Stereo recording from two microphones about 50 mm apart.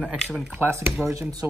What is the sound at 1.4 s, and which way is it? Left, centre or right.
Speech, right.